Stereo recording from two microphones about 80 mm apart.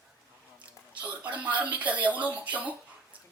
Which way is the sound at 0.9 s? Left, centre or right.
Centre.